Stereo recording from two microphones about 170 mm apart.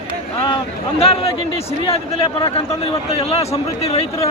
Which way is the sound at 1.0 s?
35° left (ahead or behind).